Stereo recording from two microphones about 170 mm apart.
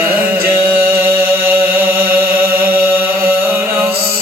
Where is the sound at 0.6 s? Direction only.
65° right (ahead or behind).